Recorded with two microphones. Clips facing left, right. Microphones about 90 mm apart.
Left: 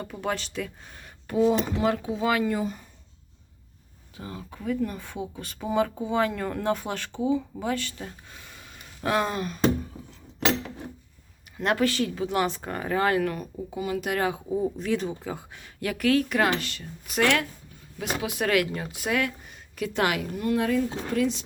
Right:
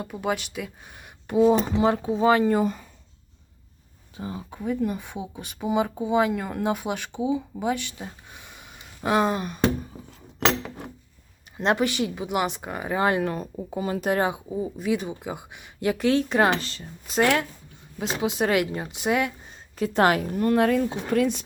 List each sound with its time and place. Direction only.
0.0 s speech: 10° right (ahead or behind); by 2.6 s 30° right (ahead or behind)
2.6 s speech: 65° right (ahead or behind)
4.2 s speech: 20° right (ahead or behind)
11.5 s speech: 20° right (ahead or behind)
14.5 s speech: 5° right (ahead or behind); by 21.4 s 55° right (ahead or behind)